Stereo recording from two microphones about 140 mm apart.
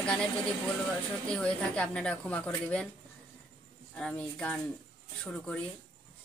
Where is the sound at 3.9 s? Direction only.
5° left (ahead or behind).